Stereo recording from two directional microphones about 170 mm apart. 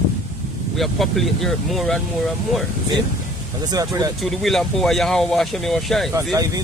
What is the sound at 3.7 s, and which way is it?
Speech, 20° right (ahead or behind).